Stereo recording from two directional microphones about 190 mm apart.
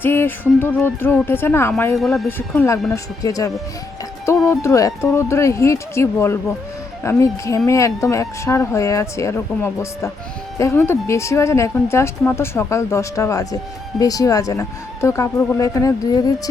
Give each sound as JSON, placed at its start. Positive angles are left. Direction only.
{"t": 0.0, "sound": "speech", "side_deg": 10}
{"t": 2.0, "sound": "speech", "side_deg": 0}
{"t": 2.6, "sound": "speech", "side_deg": 15}